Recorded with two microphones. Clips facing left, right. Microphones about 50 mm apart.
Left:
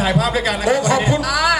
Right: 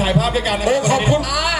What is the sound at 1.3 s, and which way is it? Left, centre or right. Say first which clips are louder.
Music: left 3 dB; left.